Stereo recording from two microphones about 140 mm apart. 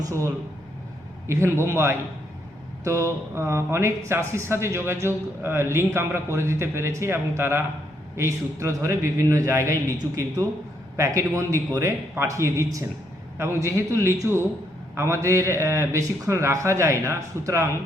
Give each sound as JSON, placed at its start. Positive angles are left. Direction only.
{"t": 0.0, "sound": "a man's voice", "side_deg": -20}